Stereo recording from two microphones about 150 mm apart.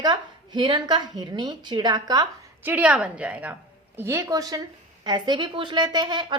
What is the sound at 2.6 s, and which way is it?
A woman's voice, 10° right (ahead or behind).